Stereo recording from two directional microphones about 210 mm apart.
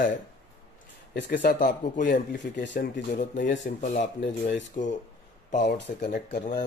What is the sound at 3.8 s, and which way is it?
Speech, 35° left (ahead or behind).